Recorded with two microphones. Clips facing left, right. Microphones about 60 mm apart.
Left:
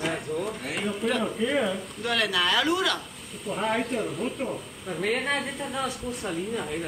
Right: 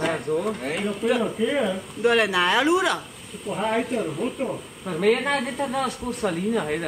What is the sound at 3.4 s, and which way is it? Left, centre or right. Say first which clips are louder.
Speech: right 3 dB; centre.